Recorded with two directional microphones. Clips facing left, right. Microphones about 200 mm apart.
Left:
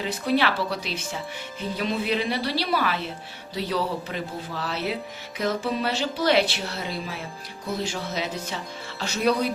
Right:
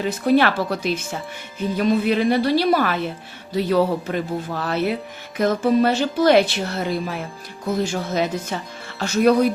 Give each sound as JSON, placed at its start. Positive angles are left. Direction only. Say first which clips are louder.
{"t": 0.0, "sound": "a woman's voice", "louder": "right 6 dB", "side_deg": -50}